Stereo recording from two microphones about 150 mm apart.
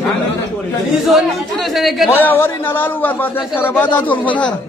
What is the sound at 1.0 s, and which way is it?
A man's voice, centre (ahead or behind).